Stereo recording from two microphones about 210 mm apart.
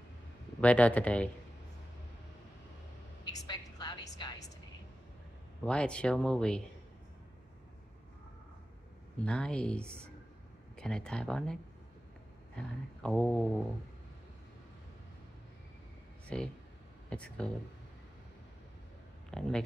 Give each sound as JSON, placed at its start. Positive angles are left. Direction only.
{"t": 0.6, "sound": "speech", "side_deg": 5}
{"t": 3.3, "sound": "a sound", "side_deg": 20}
{"t": 5.7, "sound": "speech", "side_deg": 5}
{"t": 9.2, "sound": "speech", "side_deg": 5}
{"t": 12.5, "sound": "speech", "side_deg": 5}
{"t": 16.3, "sound": "speech", "side_deg": 5}
{"t": 19.3, "sound": "speech", "side_deg": 5}